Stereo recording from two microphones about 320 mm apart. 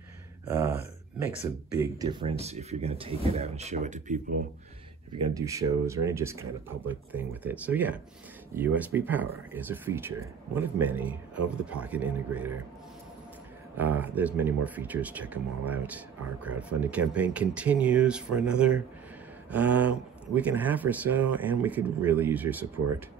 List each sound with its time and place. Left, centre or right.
0.5 s a sound: centre
1.8 s speech: centre
5.1 s speech: centre
13.7 s speech: centre